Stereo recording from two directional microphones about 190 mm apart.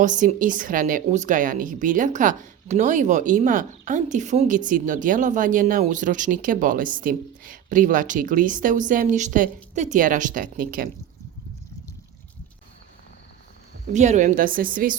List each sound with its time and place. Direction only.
0.0 s speech: 40° right (ahead or behind)
13.9 s speech: 40° right (ahead or behind)